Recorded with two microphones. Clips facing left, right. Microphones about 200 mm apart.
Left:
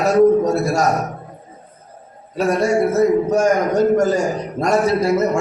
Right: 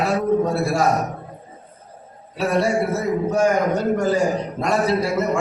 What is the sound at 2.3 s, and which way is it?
A man's voice, 45° left (ahead or behind).